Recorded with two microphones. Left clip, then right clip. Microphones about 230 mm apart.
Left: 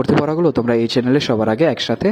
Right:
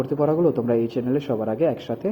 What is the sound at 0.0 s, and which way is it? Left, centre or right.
Speech, left.